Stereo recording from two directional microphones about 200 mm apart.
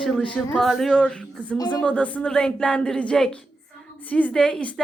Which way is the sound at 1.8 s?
5° left (ahead or behind).